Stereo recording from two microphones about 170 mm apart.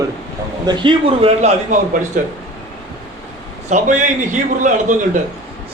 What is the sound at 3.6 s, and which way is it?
A man's voice, 45° right (ahead or behind).